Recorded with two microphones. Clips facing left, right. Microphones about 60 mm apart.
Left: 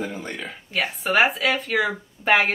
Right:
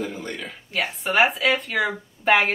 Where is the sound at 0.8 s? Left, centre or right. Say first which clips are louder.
Even; centre.